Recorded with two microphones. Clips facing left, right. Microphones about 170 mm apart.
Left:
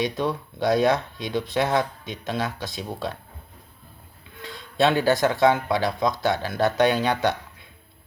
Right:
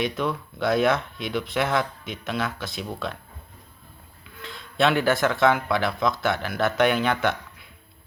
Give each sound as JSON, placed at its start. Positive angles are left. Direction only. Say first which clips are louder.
{"t": 0.0, "sound": "speech", "louder": "left 1 dB", "side_deg": 20}
{"t": 4.9, "sound": "speech", "louder": "left 1 dB", "side_deg": 15}